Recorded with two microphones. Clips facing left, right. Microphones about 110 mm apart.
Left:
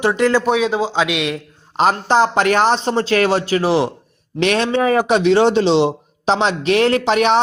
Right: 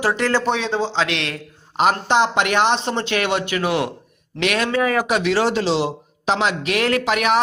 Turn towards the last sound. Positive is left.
turn(degrees=30)  # may be behind; listen again after turning